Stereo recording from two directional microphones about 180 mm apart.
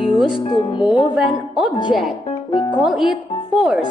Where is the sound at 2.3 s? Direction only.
25° left (ahead or behind).